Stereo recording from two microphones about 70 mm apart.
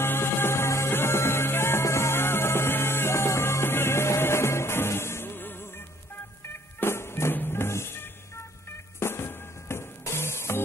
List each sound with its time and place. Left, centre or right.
0.0 s music: left